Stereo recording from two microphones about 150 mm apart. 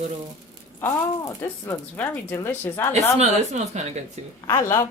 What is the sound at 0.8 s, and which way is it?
Speech, 20° left (ahead or behind).